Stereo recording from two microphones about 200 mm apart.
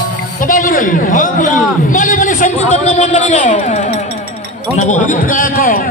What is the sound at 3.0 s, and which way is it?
Speech, 40° left (ahead or behind).